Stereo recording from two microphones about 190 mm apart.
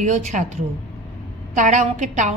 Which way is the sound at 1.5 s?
40° right (ahead or behind).